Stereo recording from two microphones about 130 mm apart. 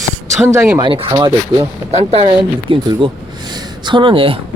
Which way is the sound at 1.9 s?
50° right (ahead or behind).